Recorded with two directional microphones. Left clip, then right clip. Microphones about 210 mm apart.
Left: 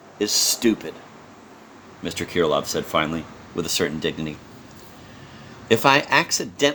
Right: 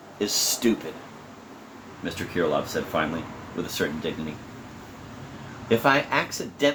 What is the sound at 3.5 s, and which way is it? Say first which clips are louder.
Speech: left 5 dB; 50° left (ahead or behind).